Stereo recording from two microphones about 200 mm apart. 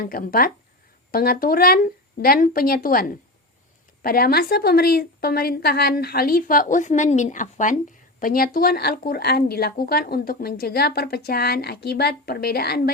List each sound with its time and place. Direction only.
0.0 s a woman's voice: 45° left (ahead or behind)